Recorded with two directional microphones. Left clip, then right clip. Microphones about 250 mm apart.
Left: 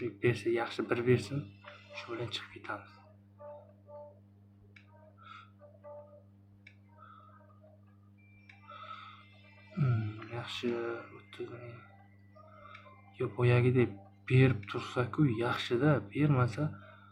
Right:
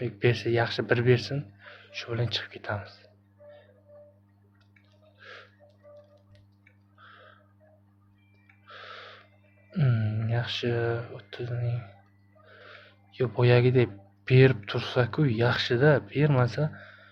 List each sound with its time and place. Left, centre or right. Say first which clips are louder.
0.0 s speech: right 5 dB; right
8.9 s a sound: right 4 dB; right
10.3 s speech: right 7 dB; right
13.1 s speech: right 8 dB; right